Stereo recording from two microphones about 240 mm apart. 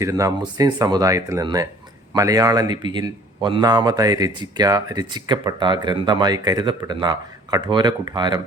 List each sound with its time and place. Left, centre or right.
0.0 s a man's voice: centre